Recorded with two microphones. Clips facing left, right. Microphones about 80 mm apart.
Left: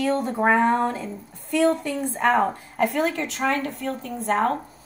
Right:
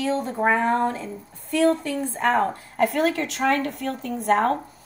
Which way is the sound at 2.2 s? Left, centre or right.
Centre.